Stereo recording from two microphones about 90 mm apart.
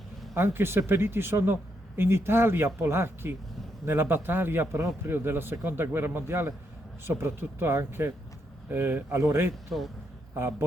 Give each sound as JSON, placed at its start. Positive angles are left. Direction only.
{"t": 0.3, "sound": "a man's voice", "side_deg": -25}